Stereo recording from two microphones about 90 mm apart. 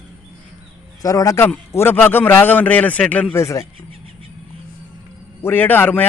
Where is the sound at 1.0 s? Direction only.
40° left (ahead or behind).